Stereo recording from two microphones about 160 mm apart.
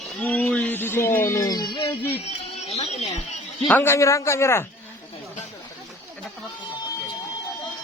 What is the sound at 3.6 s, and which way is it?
Speech, 10° left (ahead or behind).